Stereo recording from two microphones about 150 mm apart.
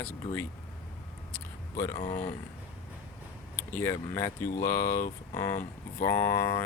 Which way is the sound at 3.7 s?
15° left (ahead or behind).